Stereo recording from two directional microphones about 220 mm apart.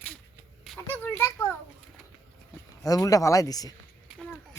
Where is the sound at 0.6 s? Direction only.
Centre (ahead or behind).